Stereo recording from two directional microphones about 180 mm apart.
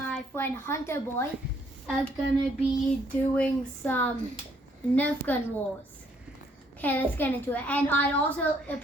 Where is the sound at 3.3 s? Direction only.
10° left (ahead or behind).